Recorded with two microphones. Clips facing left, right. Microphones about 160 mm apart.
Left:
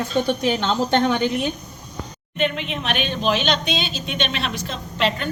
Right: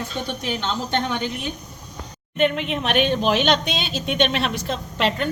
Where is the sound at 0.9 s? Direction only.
75° left (ahead or behind).